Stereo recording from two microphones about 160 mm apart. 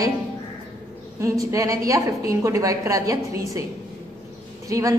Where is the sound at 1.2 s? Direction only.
20° right (ahead or behind).